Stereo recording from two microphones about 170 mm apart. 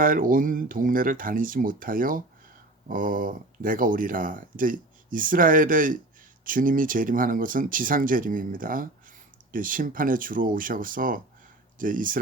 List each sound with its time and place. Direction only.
0.0 s speech: 55° right (ahead or behind)